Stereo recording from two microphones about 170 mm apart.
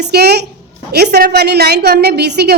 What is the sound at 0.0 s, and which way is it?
A woman's voice, 70° right (ahead or behind).